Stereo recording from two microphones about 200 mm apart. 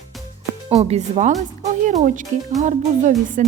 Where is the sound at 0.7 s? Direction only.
30° right (ahead or behind).